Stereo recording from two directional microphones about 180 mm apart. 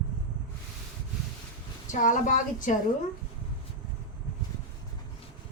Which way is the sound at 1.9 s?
45° left (ahead or behind).